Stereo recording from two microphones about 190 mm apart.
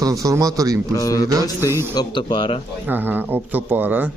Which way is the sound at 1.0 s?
20° left (ahead or behind).